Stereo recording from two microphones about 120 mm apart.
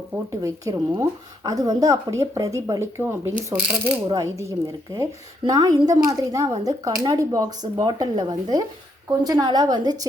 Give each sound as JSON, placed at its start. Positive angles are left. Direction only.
{"t": 0.1, "sound": "speech", "side_deg": -20}
{"t": 4.0, "sound": "a woman's voice", "side_deg": -30}